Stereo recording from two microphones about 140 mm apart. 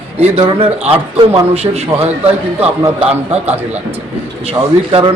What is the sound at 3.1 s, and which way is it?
A man's voice, 50° right (ahead or behind).